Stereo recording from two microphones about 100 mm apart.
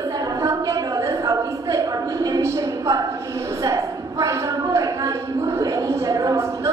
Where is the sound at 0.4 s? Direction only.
35° right (ahead or behind).